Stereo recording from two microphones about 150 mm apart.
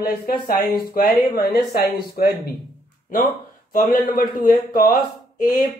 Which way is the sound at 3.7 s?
80° left.